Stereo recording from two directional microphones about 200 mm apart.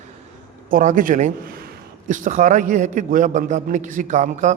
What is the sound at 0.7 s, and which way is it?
A man's voice, 40° right (ahead or behind).